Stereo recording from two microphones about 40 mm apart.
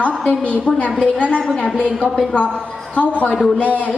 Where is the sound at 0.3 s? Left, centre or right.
Left.